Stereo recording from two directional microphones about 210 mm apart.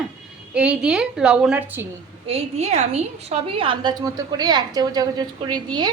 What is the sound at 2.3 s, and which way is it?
A woman's voice, 30° right (ahead or behind).